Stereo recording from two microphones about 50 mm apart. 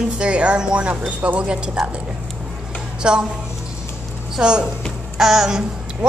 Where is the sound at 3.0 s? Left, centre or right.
Centre.